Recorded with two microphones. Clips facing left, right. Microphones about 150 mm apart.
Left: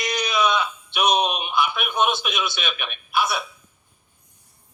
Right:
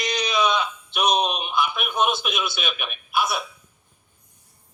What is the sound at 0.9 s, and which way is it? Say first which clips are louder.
A man's voice: left 1 dB; centre (ahead or behind).